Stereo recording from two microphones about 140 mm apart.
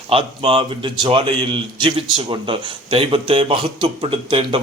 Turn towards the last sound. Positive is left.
turn(degrees=-45)  # may be behind; listen again after turning